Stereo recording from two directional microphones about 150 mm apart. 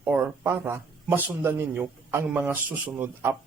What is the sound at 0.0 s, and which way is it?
A man's voice, 10° right (ahead or behind).